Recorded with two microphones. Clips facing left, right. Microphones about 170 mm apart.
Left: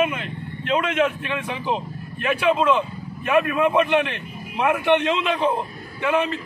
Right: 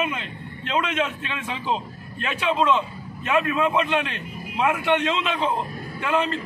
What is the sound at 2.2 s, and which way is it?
A man's voice, 10° left (ahead or behind).